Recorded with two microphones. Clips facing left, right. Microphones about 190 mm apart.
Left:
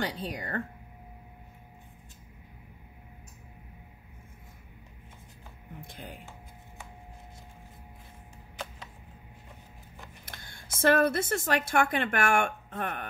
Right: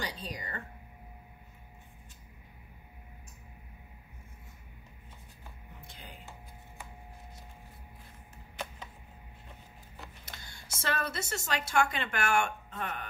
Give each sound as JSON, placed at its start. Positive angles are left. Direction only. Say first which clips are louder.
{"t": 0.0, "sound": "speech", "louder": "left 6 dB", "side_deg": 55}
{"t": 5.8, "sound": "music", "louder": "left 8 dB", "side_deg": 55}
{"t": 10.2, "sound": "speech", "louder": "left 2 dB", "side_deg": 50}